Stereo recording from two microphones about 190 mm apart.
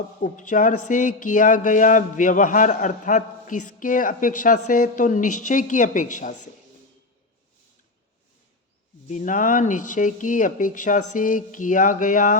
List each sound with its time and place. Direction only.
0.2 s speech: 40° left (ahead or behind)
9.0 s speech: 40° left (ahead or behind)